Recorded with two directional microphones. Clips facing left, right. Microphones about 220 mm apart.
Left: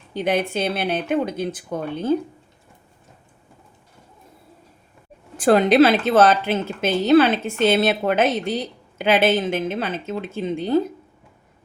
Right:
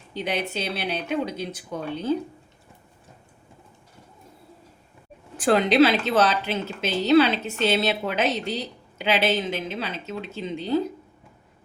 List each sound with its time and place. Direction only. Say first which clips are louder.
0.1 s a woman's voice: left 6 dB; 50° left (ahead or behind)
5.4 s a woman's voice: left 4 dB; 50° left (ahead or behind)